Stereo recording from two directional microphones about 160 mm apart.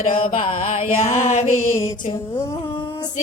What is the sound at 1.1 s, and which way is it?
Music, 45° left (ahead or behind).